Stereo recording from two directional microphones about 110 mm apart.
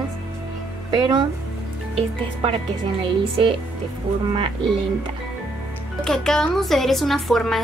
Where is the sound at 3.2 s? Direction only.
55° right (ahead or behind).